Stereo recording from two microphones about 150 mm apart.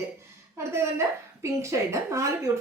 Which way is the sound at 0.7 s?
20° right (ahead or behind).